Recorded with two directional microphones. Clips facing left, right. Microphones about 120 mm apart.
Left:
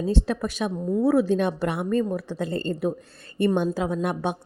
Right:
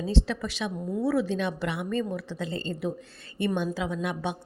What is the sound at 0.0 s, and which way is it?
A woman's voice, 50° left (ahead or behind).